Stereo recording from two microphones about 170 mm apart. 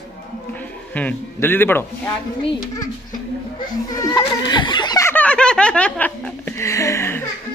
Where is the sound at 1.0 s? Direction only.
10° left (ahead or behind).